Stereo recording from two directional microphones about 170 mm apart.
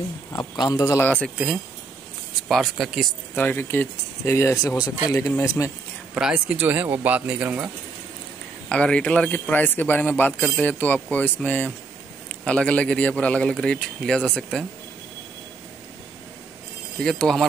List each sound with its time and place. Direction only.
0.3 s speech: 20° left (ahead or behind)
2.4 s speech: centre (ahead or behind)
3.3 s a man's voice: 10° left (ahead or behind)
6.1 s speech: 5° right (ahead or behind)
8.6 s a man's voice: 5° left (ahead or behind)
17.0 s speech: 5° left (ahead or behind)